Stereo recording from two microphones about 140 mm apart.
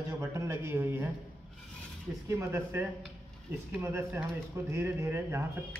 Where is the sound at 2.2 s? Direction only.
20° right (ahead or behind).